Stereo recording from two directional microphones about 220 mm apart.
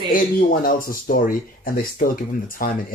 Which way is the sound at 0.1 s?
40° left (ahead or behind).